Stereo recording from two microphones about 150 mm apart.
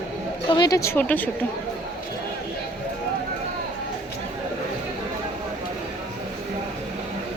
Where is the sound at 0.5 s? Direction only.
25° left (ahead or behind).